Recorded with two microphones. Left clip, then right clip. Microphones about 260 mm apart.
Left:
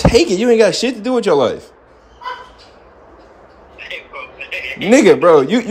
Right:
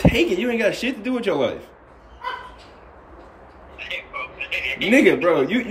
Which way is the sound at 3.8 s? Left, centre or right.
Centre.